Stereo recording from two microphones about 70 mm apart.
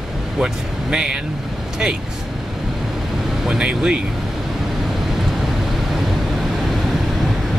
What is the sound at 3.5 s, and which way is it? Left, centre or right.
Speech, centre.